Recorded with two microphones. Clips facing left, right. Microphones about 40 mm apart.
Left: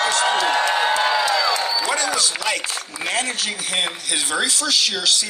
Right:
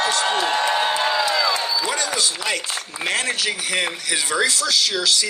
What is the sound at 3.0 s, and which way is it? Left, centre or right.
Speech, right.